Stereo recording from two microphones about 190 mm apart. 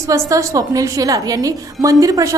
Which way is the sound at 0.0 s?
15° right (ahead or behind).